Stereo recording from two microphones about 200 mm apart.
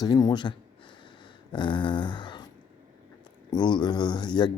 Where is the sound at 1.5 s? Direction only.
25° left (ahead or behind).